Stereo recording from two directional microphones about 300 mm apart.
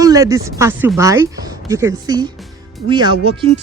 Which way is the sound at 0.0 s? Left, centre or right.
Centre.